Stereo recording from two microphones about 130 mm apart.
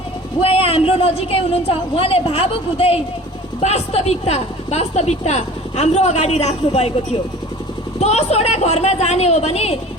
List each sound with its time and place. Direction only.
0.4 s a woman's voice: 45° left (ahead or behind)